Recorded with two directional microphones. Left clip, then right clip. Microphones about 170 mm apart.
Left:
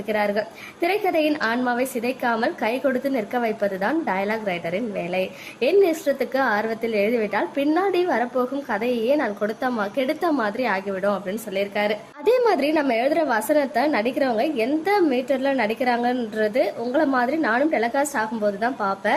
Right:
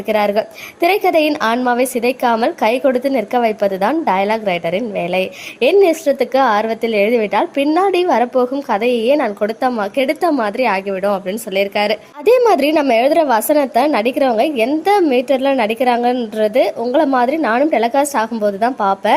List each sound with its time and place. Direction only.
0.1 s a woman's voice: 35° right (ahead or behind)